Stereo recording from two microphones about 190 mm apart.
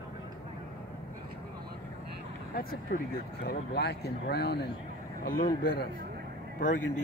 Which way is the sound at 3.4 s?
60° left (ahead or behind).